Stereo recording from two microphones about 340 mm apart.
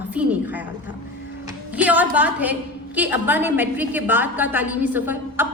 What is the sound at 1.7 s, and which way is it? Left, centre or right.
A woman's voice, centre.